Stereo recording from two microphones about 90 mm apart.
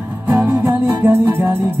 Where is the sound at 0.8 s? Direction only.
20° right (ahead or behind).